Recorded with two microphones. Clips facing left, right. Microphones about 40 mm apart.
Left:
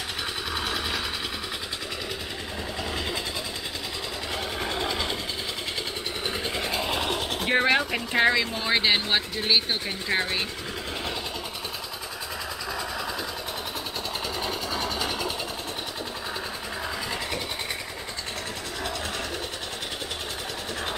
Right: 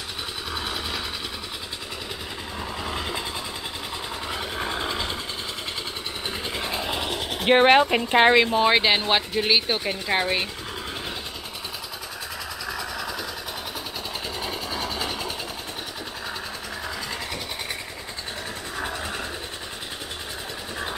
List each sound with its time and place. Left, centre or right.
0.6 s vehicle: centre
4.4 s vehicle: centre
6.4 s vehicle: centre
7.3 s speech: right
8.6 s speech: centre
12.7 s train: centre
14.4 s vehicle: centre